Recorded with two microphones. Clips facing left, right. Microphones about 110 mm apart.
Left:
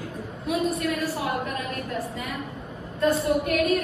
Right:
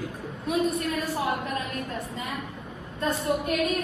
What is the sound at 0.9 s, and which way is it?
Speech, 30° right (ahead or behind).